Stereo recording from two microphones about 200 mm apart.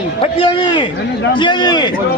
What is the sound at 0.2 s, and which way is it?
Speech, 25° left (ahead or behind).